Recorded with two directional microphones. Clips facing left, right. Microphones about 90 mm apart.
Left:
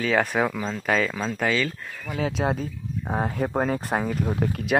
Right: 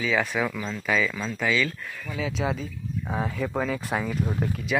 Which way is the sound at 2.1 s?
55° left (ahead or behind).